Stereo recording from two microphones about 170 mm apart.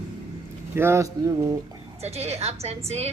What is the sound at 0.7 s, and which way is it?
Speech, 15° right (ahead or behind).